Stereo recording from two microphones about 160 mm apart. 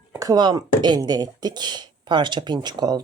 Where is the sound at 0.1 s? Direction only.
20° right (ahead or behind).